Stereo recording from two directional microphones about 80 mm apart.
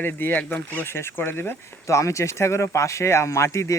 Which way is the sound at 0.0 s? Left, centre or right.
Left.